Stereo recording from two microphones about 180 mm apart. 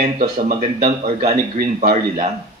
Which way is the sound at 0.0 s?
50° right (ahead or behind).